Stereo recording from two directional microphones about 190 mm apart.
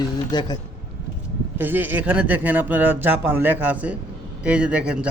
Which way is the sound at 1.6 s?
10° right (ahead or behind).